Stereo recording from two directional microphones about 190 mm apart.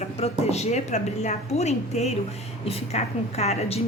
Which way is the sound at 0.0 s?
35° left (ahead or behind).